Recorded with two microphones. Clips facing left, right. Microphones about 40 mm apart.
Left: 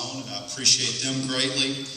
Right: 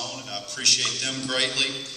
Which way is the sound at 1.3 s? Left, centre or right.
Centre.